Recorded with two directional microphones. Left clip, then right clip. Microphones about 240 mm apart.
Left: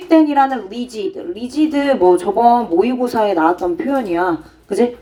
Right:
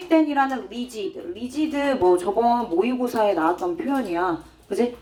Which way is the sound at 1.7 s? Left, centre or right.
Left.